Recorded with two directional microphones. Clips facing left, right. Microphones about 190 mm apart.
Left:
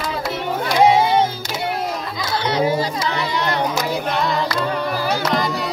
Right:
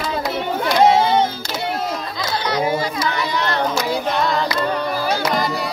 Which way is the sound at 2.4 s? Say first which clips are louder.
Left 2 dB; 30° left (ahead or behind).